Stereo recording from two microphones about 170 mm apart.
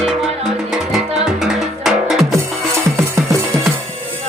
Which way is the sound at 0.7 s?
5° right (ahead or behind).